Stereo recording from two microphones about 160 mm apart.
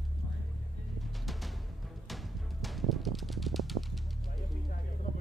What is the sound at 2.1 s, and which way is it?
Music, centre (ahead or behind).